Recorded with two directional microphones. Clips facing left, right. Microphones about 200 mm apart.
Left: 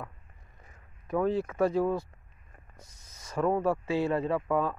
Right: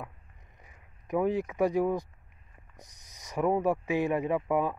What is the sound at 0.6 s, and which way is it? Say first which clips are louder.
Speech: left 1 dB; 15° right (ahead or behind).